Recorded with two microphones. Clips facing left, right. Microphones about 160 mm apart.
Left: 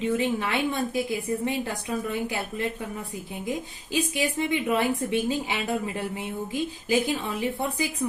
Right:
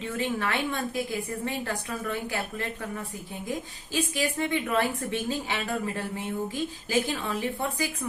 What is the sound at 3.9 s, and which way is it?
A woman's voice, 15° left (ahead or behind).